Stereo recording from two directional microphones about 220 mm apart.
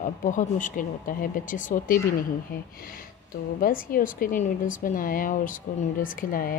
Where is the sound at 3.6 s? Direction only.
40° left (ahead or behind).